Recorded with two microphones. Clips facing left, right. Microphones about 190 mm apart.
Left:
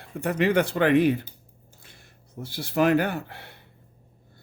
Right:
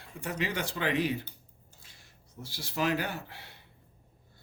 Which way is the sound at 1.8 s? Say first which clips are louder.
Left 7 dB; 55° left (ahead or behind).